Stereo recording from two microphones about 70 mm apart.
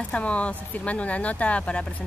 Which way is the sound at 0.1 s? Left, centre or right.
Centre.